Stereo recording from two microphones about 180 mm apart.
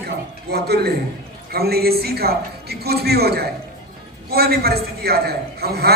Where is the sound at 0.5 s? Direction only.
60° right (ahead or behind).